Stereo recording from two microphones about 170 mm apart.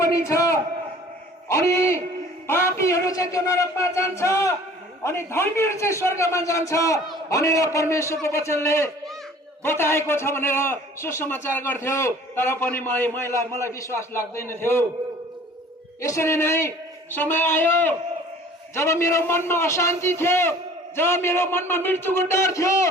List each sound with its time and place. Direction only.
0.0 s a sound: 20° left (ahead or behind)
5.0 s a man's voice: 15° left (ahead or behind)
16.0 s a man's voice: 20° left (ahead or behind)